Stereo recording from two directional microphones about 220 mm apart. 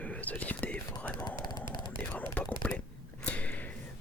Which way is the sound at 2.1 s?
5° left (ahead or behind).